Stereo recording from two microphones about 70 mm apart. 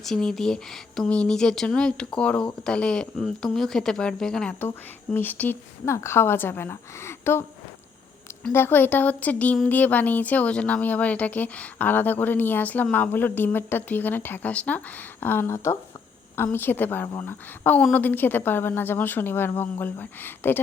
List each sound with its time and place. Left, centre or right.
0.0 s speech: centre
5.1 s speech: left
5.8 s a woman's voice: left
8.5 s a woman's voice: left